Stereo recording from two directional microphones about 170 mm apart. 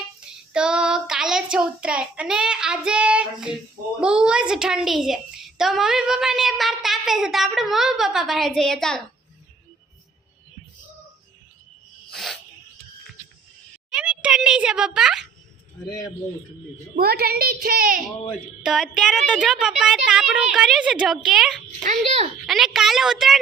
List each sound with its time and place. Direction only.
0.5 s child singing: 5° right (ahead or behind)
4.0 s a child's voice: 5° right (ahead or behind)
12.1 s cricket: centre (ahead or behind)
13.9 s a child's voice: 5° right (ahead or behind)
17.0 s a woman's voice: 65° right (ahead or behind)
18.3 s a child's voice: centre (ahead or behind)
21.8 s a child's voice: 40° right (ahead or behind)
22.4 s a child's voice: centre (ahead or behind)